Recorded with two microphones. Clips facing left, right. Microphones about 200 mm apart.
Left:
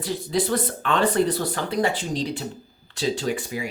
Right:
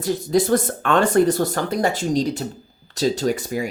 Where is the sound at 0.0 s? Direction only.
45° right (ahead or behind).